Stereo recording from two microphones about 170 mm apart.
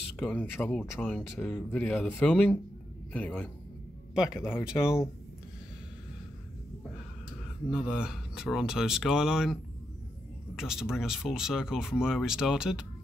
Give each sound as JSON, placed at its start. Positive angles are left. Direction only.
{"t": 0.2, "sound": "speech", "side_deg": 5}
{"t": 7.7, "sound": "speech", "side_deg": -5}